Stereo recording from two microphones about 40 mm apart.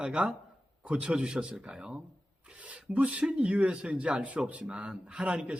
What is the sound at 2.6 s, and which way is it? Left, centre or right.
Speech, right.